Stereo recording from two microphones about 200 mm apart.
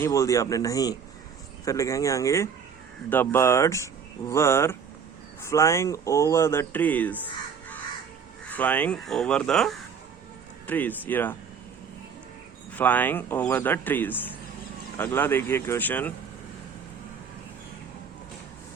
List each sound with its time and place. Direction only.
0.0 s speech: 15° left (ahead or behind)
8.5 s speech: 10° left (ahead or behind)
12.7 s speech: 10° left (ahead or behind)